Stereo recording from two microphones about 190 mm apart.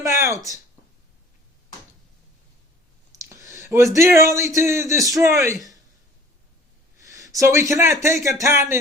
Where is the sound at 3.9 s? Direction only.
15° right (ahead or behind).